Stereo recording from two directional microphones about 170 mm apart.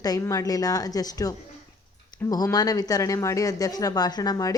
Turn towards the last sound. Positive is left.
turn(degrees=20)  # may be behind; listen again after turning